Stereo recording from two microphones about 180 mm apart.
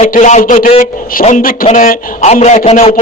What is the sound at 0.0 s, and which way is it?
A man's voice, 45° left (ahead or behind).